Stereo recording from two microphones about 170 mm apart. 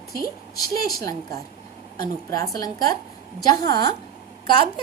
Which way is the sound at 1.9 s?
20° left (ahead or behind).